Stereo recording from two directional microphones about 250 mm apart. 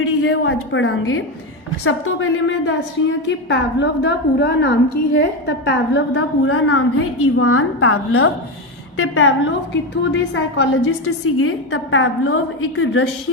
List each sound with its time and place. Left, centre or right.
0.0 s a woman's voice: left